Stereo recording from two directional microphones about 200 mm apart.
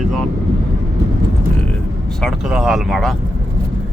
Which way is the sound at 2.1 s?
Centre (ahead or behind).